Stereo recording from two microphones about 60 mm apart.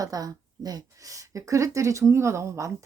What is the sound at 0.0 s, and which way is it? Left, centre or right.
Speech, right.